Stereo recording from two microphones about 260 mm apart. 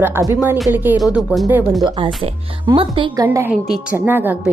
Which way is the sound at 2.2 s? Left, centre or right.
Right.